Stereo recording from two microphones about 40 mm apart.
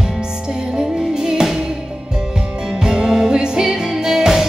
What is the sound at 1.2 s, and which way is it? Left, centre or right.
Music, centre.